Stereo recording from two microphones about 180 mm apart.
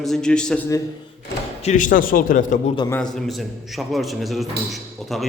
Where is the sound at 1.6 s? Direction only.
45° left (ahead or behind).